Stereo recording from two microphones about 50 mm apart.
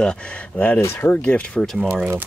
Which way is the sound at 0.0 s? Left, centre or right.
Centre.